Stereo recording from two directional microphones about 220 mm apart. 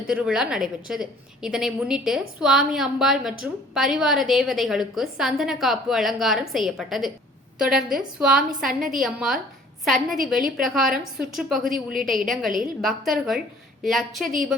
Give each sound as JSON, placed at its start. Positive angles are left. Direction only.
{"t": 0.1, "sound": "a woman's voice", "side_deg": -5}